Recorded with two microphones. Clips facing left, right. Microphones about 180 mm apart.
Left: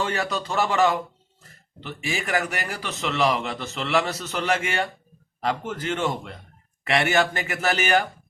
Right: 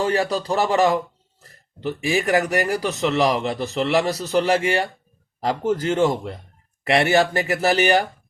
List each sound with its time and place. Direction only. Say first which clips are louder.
0.0 s a man's voice: right 5 dB; 35° right (ahead or behind)